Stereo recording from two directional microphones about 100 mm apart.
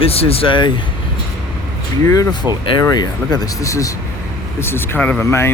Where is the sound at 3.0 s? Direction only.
40° left (ahead or behind).